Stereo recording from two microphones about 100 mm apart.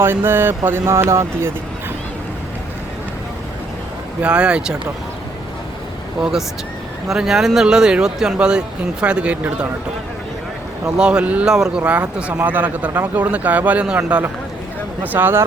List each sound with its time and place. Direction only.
0.0 s speech: 25° right (ahead or behind)
4.2 s speech: 10° right (ahead or behind)
6.1 s speech: 5° right (ahead or behind)
10.9 s speech: 10° right (ahead or behind)